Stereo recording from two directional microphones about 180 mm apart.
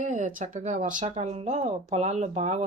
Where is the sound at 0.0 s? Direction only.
45° right (ahead or behind).